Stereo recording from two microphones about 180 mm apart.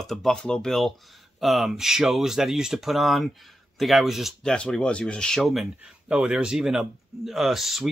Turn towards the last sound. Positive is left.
turn(degrees=0)  # may be behind; listen again after turning